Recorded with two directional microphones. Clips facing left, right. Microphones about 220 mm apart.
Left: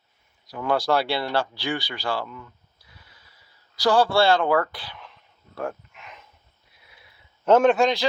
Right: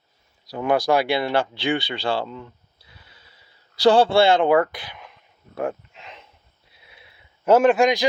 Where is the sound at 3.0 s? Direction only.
25° right (ahead or behind).